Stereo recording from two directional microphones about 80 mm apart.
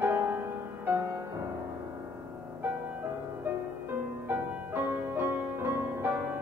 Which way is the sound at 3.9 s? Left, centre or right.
Right.